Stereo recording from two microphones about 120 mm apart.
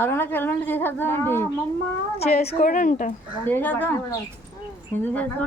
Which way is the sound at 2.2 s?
60° left (ahead or behind).